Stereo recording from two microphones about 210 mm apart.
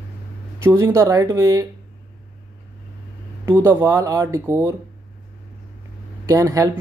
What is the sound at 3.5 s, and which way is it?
Speech, 10° right (ahead or behind).